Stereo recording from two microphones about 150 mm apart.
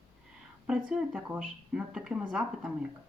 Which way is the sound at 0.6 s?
5° right (ahead or behind).